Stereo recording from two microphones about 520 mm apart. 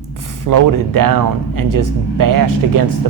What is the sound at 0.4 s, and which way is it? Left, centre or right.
Speech, right.